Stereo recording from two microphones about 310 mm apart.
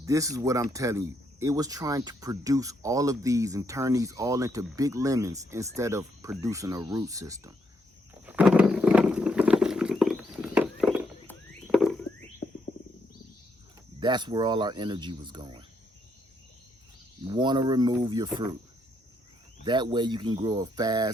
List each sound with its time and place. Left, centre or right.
0.0 s speech: centre
8.3 s a sound: centre
11.3 s rodents: centre
14.0 s speech: centre
17.2 s speech: centre
19.6 s speech: centre